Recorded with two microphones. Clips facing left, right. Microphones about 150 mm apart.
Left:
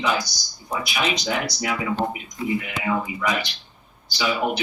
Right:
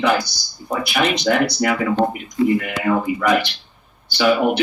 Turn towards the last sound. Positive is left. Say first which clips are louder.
# right 7 dB
turn(degrees=-60)  # may be behind; listen again after turning